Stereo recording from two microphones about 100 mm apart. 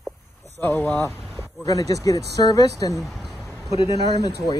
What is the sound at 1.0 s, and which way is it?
Speech, 30° left (ahead or behind).